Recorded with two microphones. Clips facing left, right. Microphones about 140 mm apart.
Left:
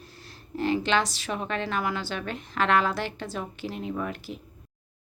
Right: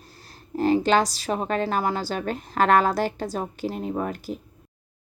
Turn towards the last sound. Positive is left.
turn(degrees=-40)  # may be behind; listen again after turning